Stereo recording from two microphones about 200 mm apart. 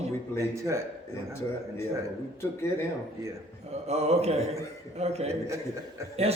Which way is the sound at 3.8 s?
30° right (ahead or behind).